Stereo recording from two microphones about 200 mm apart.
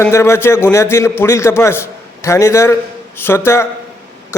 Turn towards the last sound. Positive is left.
turn(degrees=10)  # may be behind; listen again after turning